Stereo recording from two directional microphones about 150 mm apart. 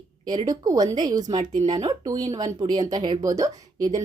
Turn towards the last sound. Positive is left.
turn(degrees=-25)  # may be behind; listen again after turning